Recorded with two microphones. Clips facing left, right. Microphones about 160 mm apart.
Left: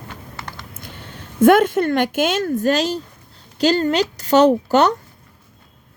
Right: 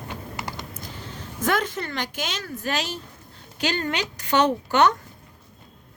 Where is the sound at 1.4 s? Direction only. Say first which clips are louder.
Left 13 dB; 55° left (ahead or behind); by 4.9 s 35° left (ahead or behind).